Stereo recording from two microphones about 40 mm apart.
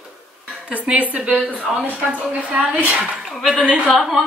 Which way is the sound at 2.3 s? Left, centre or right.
Right.